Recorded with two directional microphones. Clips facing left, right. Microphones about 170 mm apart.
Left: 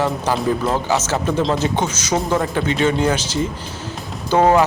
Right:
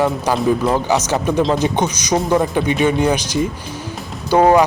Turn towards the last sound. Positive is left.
turn(degrees=-15)  # may be behind; listen again after turning